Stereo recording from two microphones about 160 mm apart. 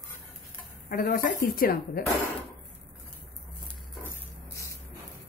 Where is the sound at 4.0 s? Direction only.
20° left (ahead or behind).